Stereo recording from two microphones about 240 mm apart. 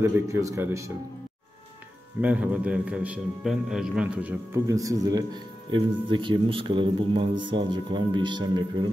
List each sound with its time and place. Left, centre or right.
0.0 s speech: centre
2.2 s a man's voice: centre